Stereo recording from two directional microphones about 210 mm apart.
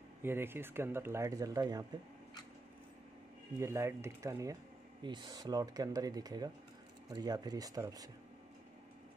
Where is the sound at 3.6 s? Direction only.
15° right (ahead or behind).